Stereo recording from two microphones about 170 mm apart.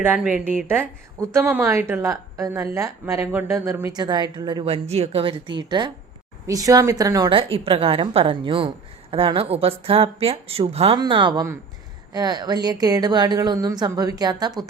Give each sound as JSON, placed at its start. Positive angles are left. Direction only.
{"t": 0.0, "sound": "a woman's voice", "side_deg": -10}
{"t": 10.9, "sound": "a woman's voice", "side_deg": -25}